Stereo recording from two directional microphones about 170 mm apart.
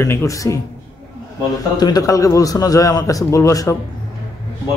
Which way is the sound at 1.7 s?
25° left (ahead or behind).